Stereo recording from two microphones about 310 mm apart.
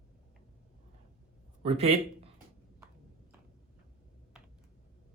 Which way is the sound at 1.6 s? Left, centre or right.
Centre.